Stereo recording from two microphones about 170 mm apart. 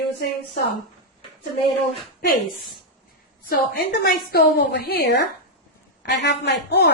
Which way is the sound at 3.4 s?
60° left (ahead or behind).